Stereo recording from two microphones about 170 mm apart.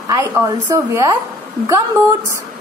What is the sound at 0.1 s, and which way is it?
A woman's voice, 15° right (ahead or behind).